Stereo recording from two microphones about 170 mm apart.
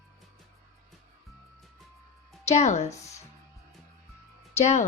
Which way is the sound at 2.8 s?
20° left (ahead or behind).